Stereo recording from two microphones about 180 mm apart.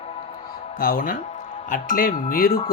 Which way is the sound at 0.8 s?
50° left (ahead or behind).